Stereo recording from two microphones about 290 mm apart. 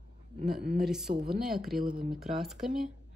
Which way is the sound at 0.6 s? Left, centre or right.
Right.